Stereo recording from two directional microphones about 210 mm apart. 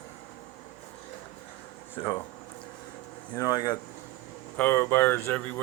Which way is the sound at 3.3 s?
15° left (ahead or behind).